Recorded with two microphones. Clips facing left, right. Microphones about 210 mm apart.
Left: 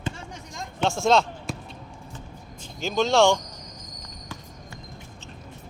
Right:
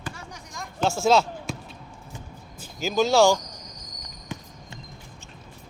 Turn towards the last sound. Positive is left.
turn(degrees=-20)  # may be behind; listen again after turning